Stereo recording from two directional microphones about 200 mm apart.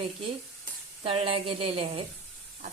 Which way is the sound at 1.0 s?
25° right (ahead or behind).